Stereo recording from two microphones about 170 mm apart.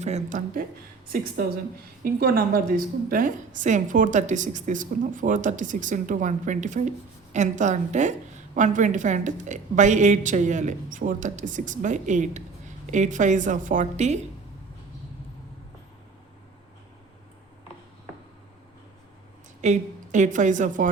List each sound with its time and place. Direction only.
0.0 s a woman's voice: 45° right (ahead or behind)
1.0 s a woman's voice: 60° right (ahead or behind); by 14.2 s 40° right (ahead or behind)
19.6 s a woman's voice: 45° right (ahead or behind)